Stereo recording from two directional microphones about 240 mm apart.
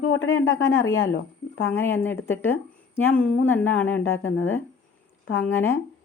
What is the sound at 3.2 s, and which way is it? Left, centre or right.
Speech, left.